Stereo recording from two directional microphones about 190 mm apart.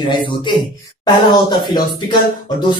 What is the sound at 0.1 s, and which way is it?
Speech, 25° left (ahead or behind).